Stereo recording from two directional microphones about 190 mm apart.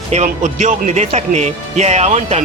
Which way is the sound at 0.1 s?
35° right (ahead or behind).